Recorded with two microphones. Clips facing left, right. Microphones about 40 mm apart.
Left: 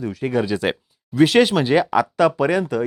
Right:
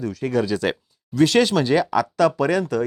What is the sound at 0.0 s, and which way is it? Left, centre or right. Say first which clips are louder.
Speech: left 1 dB; left.